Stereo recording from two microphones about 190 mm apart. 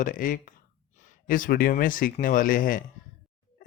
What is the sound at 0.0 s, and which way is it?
Speech, 45° left (ahead or behind).